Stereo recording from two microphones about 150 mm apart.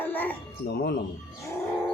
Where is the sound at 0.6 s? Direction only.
90° left.